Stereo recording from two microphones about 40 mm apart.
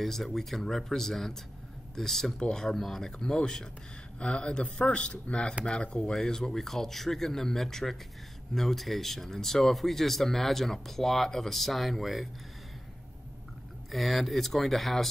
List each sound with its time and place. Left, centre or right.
0.0 s speech: centre; by 6.1 s left
6.1 s speech: centre
13.9 s speech: centre